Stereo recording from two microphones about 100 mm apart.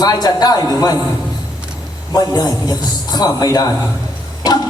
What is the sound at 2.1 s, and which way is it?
A man's voice, 40° left (ahead or behind).